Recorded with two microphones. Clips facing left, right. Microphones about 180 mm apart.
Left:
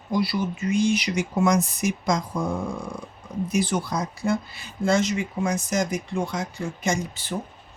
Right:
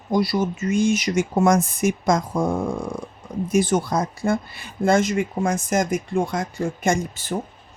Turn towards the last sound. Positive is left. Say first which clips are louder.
# right 4 dB
turn(degrees=-50)  # may be behind; listen again after turning